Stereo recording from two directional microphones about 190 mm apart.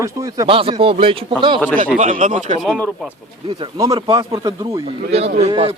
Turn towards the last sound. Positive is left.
turn(degrees=-30)  # may be behind; listen again after turning